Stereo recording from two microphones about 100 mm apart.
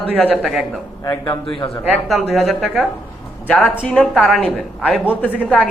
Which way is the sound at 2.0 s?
Centre (ahead or behind).